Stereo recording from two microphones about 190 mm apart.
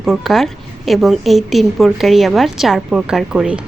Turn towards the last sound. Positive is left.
turn(degrees=-5)  # may be behind; listen again after turning